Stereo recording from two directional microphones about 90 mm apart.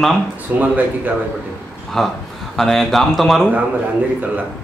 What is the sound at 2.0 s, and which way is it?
A man's voice, 5° left (ahead or behind).